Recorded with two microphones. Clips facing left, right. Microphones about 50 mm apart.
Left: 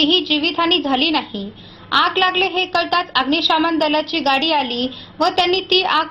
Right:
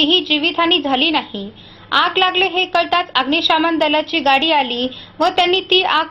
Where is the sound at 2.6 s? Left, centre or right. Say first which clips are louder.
Right 2 dB; right.